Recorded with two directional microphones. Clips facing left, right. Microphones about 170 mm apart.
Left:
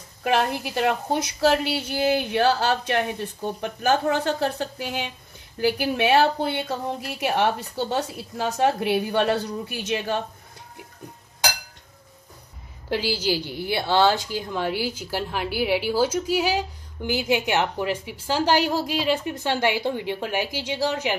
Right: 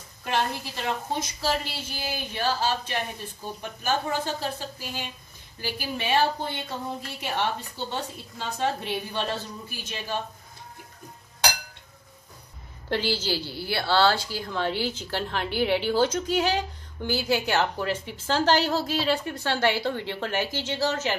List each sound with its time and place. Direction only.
0.2 s a woman's voice: 70° left (ahead or behind)
12.9 s a woman's voice: 10° left (ahead or behind)